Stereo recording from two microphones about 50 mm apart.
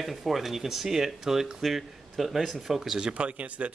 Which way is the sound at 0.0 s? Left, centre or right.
Centre.